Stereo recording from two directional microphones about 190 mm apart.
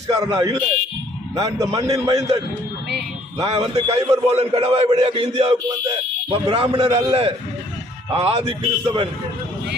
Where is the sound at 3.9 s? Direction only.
30° right (ahead or behind).